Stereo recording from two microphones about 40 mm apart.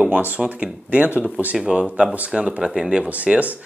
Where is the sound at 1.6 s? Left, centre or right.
Centre.